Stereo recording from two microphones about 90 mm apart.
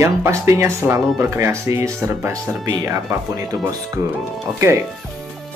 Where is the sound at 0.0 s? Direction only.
30° right (ahead or behind).